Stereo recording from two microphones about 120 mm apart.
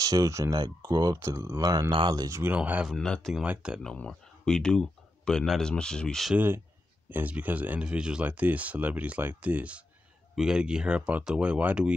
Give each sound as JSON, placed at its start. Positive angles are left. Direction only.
{"t": 0.0, "sound": "speech", "side_deg": -30}
{"t": 2.5, "sound": "speech", "side_deg": -15}
{"t": 2.9, "sound": "speech", "side_deg": 5}
{"t": 3.4, "sound": "speech", "side_deg": -10}
{"t": 3.8, "sound": "speech", "side_deg": 5}
{"t": 6.3, "sound": "speech", "side_deg": -20}